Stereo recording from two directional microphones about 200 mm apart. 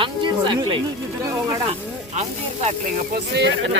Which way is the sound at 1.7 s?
35° right (ahead or behind).